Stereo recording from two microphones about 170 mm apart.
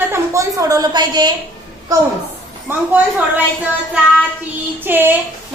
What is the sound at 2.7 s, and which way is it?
Speech, 15° right (ahead or behind).